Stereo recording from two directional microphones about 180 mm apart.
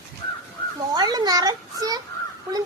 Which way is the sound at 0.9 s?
20° right (ahead or behind).